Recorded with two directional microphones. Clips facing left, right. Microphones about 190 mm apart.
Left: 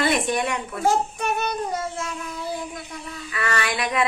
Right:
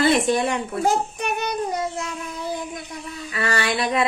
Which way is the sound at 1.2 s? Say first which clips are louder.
Even; 20° right (ahead or behind).